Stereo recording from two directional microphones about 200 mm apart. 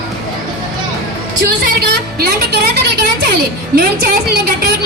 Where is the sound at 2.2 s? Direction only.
55° right (ahead or behind).